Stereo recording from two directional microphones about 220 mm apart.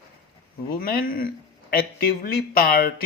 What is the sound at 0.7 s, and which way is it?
Speech, 45° left (ahead or behind).